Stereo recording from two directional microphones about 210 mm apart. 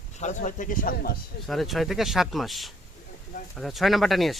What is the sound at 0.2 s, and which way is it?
Speech, 35° left (ahead or behind).